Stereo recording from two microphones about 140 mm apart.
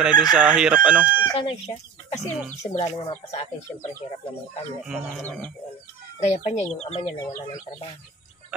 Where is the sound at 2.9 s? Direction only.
30° left (ahead or behind).